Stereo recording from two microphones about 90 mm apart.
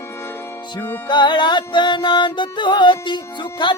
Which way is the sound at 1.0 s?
55° left (ahead or behind).